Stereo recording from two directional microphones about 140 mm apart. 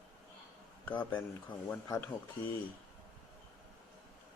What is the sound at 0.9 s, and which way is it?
Speech, 15° left (ahead or behind).